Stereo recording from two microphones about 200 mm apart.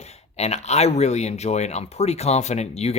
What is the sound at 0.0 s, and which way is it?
Speech, 35° left (ahead or behind).